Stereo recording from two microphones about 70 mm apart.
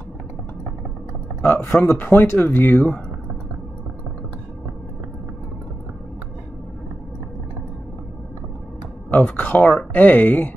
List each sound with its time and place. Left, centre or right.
1.4 s speech: left
9.1 s speech: left